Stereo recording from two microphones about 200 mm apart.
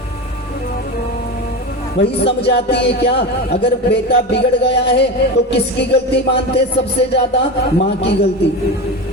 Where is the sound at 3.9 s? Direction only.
60° left (ahead or behind).